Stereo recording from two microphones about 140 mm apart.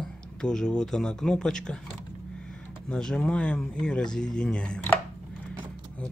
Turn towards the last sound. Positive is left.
turn(degrees=10)  # may be behind; listen again after turning